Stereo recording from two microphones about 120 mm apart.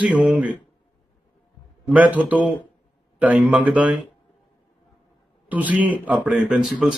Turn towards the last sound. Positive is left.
turn(degrees=-5)  # may be behind; listen again after turning